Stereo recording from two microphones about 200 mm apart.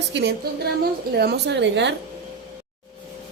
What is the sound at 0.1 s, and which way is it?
A woman's voice, 60° right (ahead or behind).